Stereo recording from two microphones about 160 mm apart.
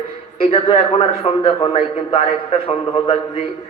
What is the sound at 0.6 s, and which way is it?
Speech, 35° left (ahead or behind).